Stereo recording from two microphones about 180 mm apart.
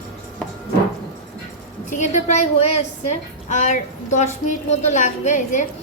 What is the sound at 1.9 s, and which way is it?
A woman's voice, 40° left (ahead or behind).